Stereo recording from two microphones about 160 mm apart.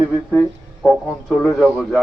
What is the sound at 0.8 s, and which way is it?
Speech, centre (ahead or behind).